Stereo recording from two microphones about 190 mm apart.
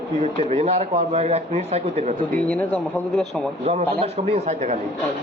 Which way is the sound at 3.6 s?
35° right (ahead or behind).